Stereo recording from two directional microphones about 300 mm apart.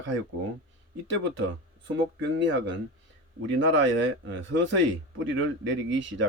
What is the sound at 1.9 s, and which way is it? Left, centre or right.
Speech, right.